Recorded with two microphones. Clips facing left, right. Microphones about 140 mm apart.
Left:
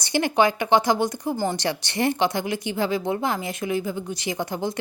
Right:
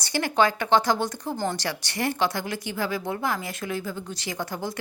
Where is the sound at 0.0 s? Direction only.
20° left (ahead or behind).